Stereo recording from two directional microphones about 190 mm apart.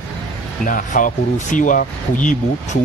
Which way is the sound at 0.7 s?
45° left (ahead or behind).